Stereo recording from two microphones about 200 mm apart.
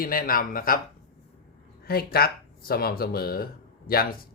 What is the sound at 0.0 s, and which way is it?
Speech, 45° left (ahead or behind).